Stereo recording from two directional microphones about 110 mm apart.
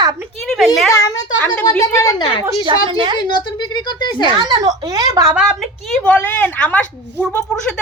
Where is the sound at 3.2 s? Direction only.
45° left (ahead or behind).